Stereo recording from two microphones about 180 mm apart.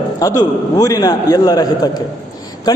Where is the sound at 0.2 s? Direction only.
20° left (ahead or behind).